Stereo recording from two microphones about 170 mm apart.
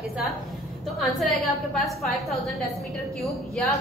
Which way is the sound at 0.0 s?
Centre (ahead or behind).